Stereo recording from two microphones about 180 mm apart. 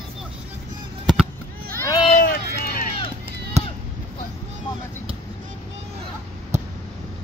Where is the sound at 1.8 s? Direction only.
20° left (ahead or behind).